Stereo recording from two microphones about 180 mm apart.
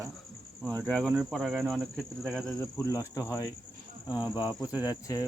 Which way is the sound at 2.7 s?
15° left (ahead or behind).